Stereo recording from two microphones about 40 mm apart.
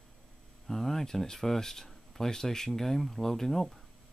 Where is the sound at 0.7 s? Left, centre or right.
Centre.